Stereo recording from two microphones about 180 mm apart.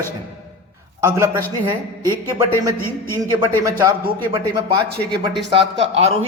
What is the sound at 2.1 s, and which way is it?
Speech, 20° right (ahead or behind).